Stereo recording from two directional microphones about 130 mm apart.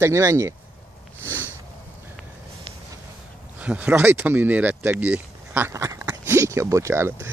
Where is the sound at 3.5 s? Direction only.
10° right (ahead or behind).